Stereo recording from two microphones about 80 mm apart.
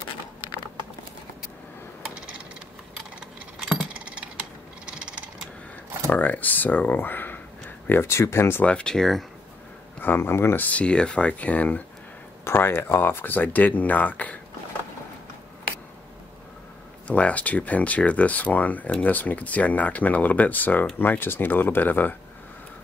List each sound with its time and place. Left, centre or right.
3.2 s a sound: centre
6.0 s speech: centre
8.6 s speech: centre
9.9 s speech: left
12.4 s speech: left
17.1 s speech: centre